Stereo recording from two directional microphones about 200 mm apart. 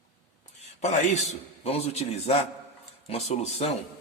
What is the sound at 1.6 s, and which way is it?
A man's voice, 30° left (ahead or behind).